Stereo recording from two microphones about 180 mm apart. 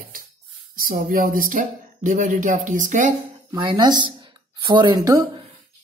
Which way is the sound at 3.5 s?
25° right (ahead or behind).